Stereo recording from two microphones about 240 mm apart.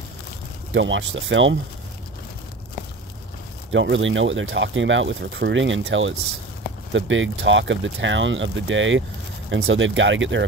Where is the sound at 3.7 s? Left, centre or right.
Right.